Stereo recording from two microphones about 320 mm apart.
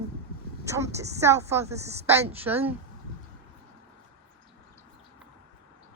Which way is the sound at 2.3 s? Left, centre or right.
Centre.